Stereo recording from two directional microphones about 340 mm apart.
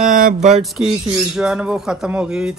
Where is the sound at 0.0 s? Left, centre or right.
Right.